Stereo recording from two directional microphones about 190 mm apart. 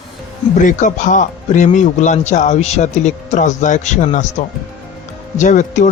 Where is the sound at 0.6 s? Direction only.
40° left (ahead or behind).